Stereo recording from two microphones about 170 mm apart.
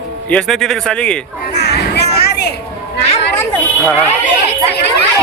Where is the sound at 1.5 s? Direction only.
75° left (ahead or behind).